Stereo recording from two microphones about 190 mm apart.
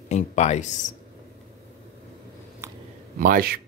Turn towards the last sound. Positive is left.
turn(degrees=-50)  # may be behind; listen again after turning